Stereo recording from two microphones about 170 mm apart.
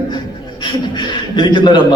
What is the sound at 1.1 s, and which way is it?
Speech, 25° left (ahead or behind).